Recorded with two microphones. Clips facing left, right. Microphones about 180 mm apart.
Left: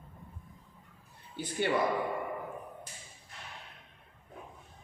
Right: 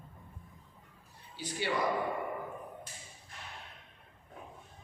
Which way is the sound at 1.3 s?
55° left (ahead or behind).